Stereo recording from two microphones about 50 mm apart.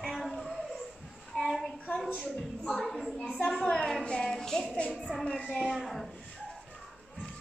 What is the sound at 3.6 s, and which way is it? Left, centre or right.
Music, centre.